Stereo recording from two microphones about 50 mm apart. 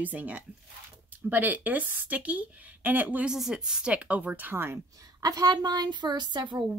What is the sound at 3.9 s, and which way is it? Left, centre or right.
Speech, right.